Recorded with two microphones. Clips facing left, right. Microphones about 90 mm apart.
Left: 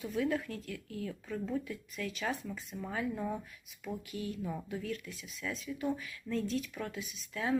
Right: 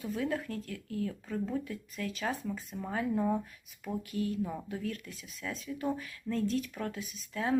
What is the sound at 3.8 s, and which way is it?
Speech, 40° right (ahead or behind).